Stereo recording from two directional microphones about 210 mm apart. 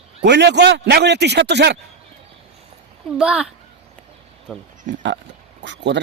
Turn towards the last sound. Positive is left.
turn(degrees=-55)  # may be behind; listen again after turning